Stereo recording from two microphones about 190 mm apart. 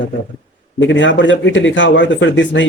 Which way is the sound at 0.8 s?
75° left (ahead or behind).